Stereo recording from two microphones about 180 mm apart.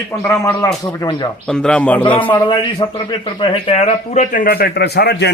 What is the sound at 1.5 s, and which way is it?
Speech, 5° left (ahead or behind).